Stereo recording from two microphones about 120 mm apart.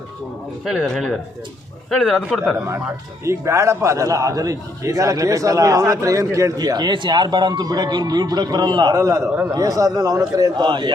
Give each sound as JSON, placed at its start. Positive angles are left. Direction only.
{"t": 0.6, "sound": "speech", "side_deg": -5}
{"t": 3.2, "sound": "a man's voice", "side_deg": -25}